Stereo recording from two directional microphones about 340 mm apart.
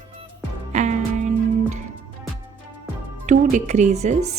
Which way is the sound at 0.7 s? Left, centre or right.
Right.